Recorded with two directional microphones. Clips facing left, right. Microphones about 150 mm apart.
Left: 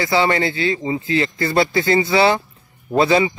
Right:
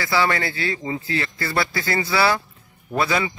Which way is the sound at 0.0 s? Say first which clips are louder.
Left 4 dB; 20° left (ahead or behind).